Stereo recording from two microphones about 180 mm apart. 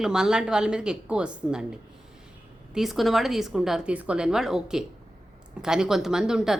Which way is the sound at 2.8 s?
Centre (ahead or behind).